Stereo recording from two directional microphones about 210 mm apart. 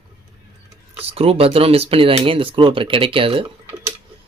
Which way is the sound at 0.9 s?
25° right (ahead or behind).